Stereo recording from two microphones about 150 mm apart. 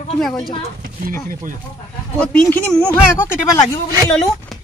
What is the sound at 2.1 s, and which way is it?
Speech, 5° left (ahead or behind).